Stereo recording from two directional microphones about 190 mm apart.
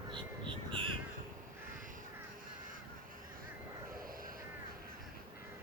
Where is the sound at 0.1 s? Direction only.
25° right (ahead or behind).